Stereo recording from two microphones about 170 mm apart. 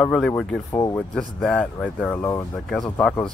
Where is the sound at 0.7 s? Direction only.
20° left (ahead or behind).